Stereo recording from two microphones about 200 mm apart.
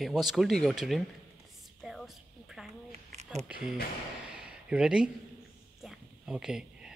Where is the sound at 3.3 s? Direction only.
5° right (ahead or behind).